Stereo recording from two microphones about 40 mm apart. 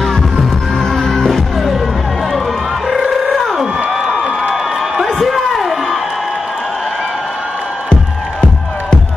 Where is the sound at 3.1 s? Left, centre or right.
Centre.